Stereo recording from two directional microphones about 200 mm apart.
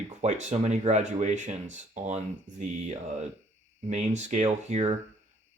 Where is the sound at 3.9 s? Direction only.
35° right (ahead or behind).